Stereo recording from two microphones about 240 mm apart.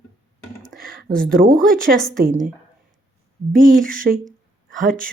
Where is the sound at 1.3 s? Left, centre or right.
Right.